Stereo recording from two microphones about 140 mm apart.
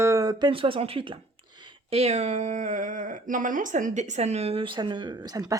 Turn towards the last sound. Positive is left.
turn(degrees=-25)  # may be behind; listen again after turning